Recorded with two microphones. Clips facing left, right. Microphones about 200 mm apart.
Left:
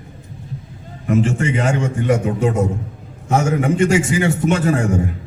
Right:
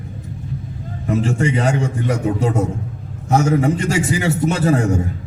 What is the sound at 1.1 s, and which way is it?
Speech, 35° right (ahead or behind).